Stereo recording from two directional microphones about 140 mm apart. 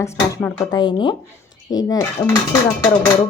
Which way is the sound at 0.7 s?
35° left (ahead or behind).